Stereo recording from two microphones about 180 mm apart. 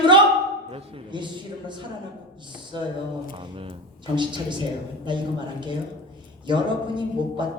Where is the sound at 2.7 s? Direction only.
25° right (ahead or behind).